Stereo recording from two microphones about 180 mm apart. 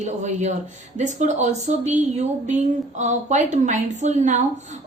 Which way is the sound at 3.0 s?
40° right (ahead or behind).